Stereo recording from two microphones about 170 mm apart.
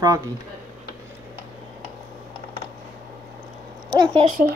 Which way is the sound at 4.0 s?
30° right (ahead or behind).